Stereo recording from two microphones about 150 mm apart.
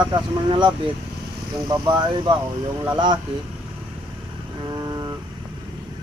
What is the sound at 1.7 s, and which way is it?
Speech, 30° right (ahead or behind).